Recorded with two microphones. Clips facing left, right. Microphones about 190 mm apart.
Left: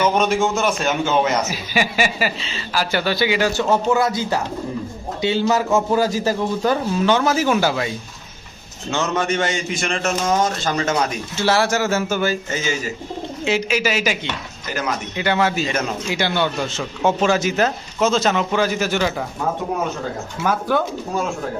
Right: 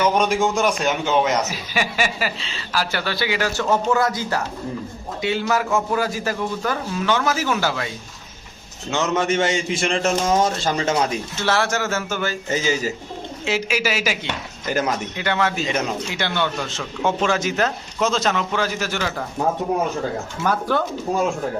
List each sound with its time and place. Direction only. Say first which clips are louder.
0.1 s a man's voice: left 1 dB; 10° right (ahead or behind)
1.5 s a woman's voice: left 3 dB; 5° left (ahead or behind)
2.9 s a man's voice: left 5 dB; 15° left (ahead or behind)
7.5 s a man's voice: left 4 dB; 15° left (ahead or behind)
8.9 s a man's voice: even; 20° right (ahead or behind)
11.4 s a man's voice: left 4 dB; 10° left (ahead or behind)
13.4 s a woman's voice: left 3 dB; 5° right (ahead or behind)
14.7 s speech: right 3 dB; 45° right (ahead or behind)
15.1 s a woman's voice: left 3 dB; 5° left (ahead or behind)
20.4 s a woman's voice: left 1 dB; 5° left (ahead or behind)